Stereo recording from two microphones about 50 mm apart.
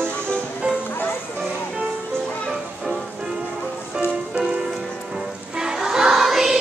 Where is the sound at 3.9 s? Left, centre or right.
Centre.